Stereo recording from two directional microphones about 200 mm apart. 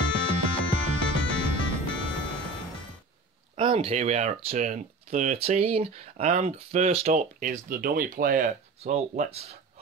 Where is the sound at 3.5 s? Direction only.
25° right (ahead or behind); by 8.4 s 45° right (ahead or behind).